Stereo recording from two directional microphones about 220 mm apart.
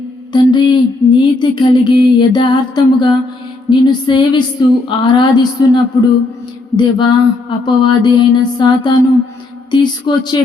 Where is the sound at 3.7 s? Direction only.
20° left (ahead or behind).